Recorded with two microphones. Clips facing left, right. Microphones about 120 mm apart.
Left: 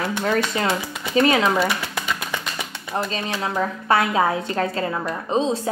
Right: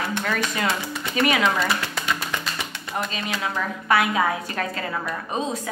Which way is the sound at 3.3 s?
30° left (ahead or behind).